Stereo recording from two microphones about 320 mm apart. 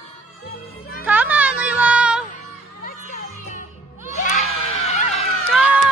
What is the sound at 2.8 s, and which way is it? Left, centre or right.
Music, left.